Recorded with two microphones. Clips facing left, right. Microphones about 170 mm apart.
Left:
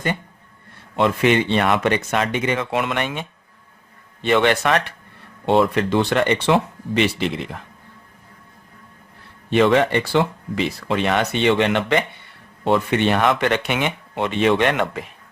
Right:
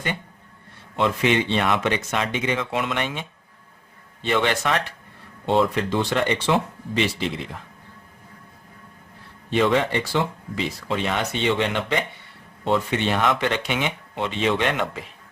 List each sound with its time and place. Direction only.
0.9 s speech: 55° left (ahead or behind)
9.5 s speech: 65° left (ahead or behind)